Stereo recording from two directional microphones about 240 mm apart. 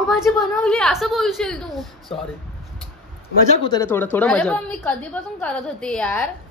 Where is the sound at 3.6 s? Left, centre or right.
Centre.